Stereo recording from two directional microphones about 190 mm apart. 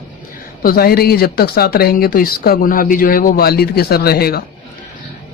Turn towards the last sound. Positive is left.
turn(degrees=55)  # may be behind; listen again after turning